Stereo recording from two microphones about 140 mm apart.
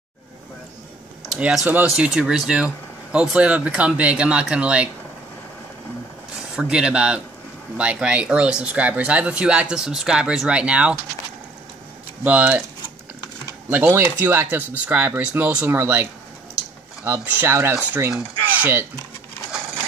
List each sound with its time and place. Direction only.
1.3 s speech: 5° right (ahead or behind)
6.5 s speech: 5° right (ahead or behind)
12.2 s speech: 10° right (ahead or behind)
13.7 s speech: 15° right (ahead or behind)